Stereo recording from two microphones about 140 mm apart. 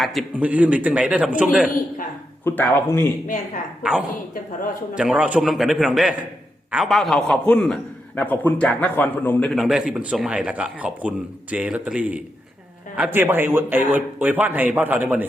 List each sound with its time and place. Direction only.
0.0 s a man's voice: centre (ahead or behind)
2.4 s a man's voice: 15° left (ahead or behind)
3.2 s speech: 70° left (ahead or behind)
3.8 s a man's voice: 10° right (ahead or behind); by 9.5 s 10° left (ahead or behind)
9.5 s a man's voice: centre (ahead or behind)